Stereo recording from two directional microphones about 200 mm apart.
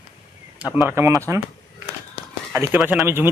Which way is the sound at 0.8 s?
10° right (ahead or behind).